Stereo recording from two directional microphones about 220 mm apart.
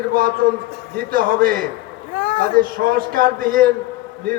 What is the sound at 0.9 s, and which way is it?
A man's voice, 40° right (ahead or behind).